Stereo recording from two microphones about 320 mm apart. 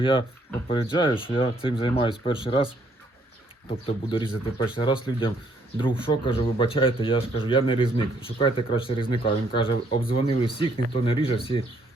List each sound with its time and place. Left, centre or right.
0.0 s speech: centre
3.7 s speech: centre